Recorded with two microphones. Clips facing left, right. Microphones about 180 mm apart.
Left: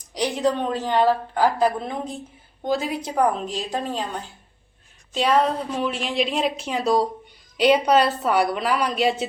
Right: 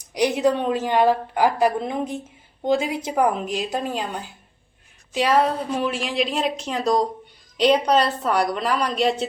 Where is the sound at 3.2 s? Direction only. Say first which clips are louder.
Right 1 dB; 10° right (ahead or behind).